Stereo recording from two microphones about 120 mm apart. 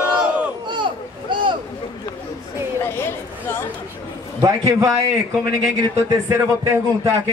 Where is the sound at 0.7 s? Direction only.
40° right (ahead or behind).